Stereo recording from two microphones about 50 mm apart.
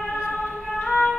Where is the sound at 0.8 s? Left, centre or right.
Centre.